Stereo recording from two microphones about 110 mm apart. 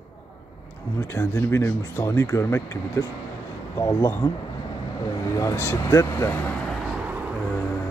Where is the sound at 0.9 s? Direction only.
20° left (ahead or behind).